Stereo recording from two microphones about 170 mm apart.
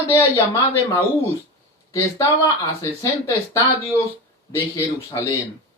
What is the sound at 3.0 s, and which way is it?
Speech, 20° left (ahead or behind).